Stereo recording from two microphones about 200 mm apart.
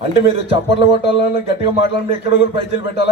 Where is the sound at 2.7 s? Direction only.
60° left (ahead or behind).